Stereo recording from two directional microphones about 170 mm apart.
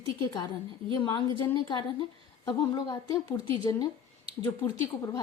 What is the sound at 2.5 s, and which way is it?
Speech, 25° left (ahead or behind).